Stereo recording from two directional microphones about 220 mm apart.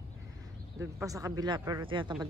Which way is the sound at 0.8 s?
15° right (ahead or behind).